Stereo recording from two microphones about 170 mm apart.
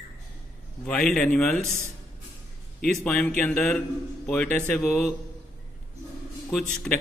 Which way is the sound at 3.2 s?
5° left (ahead or behind).